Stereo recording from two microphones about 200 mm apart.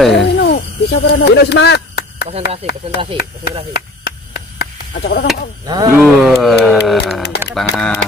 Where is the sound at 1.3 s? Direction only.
55° left (ahead or behind).